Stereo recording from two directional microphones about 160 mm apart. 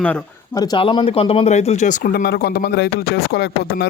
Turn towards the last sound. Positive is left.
turn(degrees=90)